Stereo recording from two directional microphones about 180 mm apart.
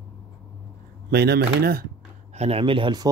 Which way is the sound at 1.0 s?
60° right (ahead or behind).